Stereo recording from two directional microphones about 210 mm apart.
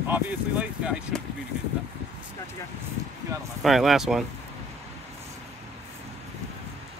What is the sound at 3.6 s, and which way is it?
Speech, centre (ahead or behind).